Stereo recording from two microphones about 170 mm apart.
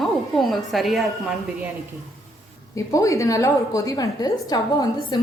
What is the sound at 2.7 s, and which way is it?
A woman's voice, 20° left (ahead or behind).